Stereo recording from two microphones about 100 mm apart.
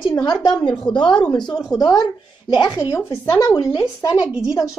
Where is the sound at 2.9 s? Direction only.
25° left (ahead or behind).